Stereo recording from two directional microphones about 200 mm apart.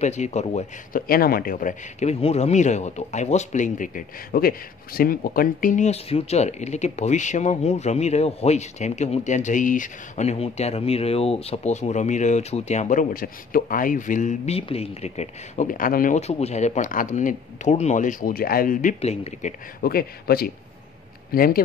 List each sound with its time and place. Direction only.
0.0 s speech: 35° left (ahead or behind)
1.0 s speech: 45° left (ahead or behind)
19.8 s speech: 50° left (ahead or behind)